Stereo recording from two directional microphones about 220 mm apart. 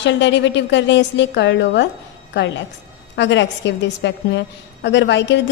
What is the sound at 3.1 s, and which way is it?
A woman's voice, 55° left (ahead or behind).